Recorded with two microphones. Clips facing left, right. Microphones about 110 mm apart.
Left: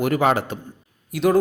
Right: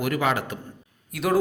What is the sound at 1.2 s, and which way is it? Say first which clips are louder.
Speech: left 4 dB; centre (ahead or behind).